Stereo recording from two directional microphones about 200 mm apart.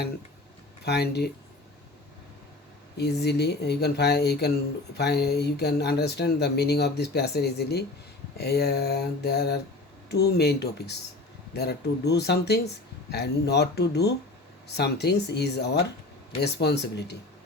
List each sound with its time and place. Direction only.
0.9 s speech: 55° left (ahead or behind)
3.0 s speech: 55° left (ahead or behind)